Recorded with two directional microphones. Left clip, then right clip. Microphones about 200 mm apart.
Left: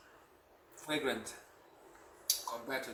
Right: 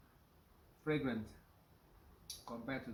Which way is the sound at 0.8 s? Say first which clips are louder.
Left 3 dB; centre (ahead or behind).